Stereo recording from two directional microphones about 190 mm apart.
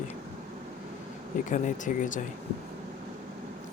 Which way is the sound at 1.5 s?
40° left (ahead or behind).